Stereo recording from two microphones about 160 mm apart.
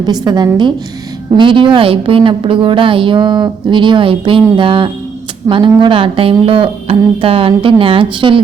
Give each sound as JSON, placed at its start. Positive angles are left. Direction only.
{"t": 0.0, "sound": "a woman's voice", "side_deg": -25}